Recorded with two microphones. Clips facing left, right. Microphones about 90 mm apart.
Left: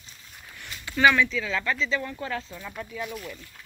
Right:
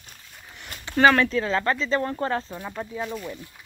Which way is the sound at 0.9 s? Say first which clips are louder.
Right 3 dB; 45° right (ahead or behind).